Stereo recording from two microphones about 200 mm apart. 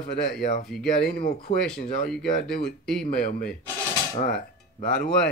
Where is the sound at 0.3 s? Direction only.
45° left (ahead or behind).